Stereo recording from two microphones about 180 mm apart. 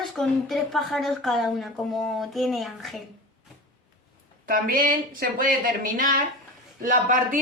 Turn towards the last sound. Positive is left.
turn(degrees=-45)  # may be behind; listen again after turning